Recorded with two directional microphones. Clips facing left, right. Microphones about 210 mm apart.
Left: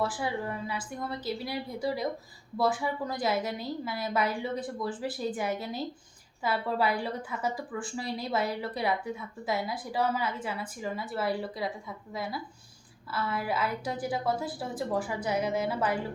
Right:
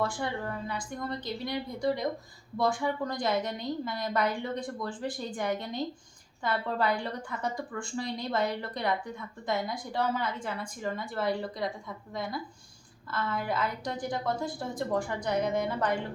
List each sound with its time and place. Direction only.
0.0 s a woman's voice: 5° left (ahead or behind)